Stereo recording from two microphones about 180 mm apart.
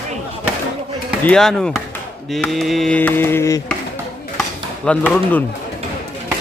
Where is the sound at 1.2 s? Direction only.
5° left (ahead or behind).